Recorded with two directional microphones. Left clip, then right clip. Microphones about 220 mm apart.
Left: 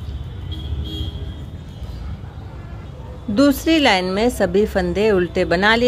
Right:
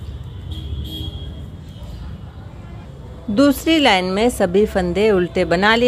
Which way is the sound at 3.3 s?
10° right (ahead or behind).